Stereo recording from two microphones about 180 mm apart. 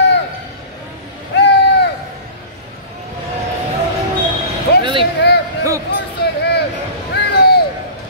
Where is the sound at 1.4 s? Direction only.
70° left (ahead or behind).